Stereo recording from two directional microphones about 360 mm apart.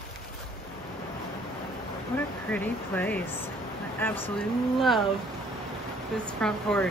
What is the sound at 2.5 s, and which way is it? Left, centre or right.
Speech, centre.